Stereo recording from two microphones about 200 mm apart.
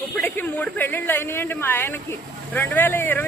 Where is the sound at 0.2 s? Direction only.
10° left (ahead or behind).